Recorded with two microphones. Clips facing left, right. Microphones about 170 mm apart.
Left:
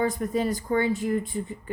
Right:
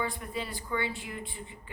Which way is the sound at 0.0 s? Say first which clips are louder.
Left 10 dB; 45° left (ahead or behind).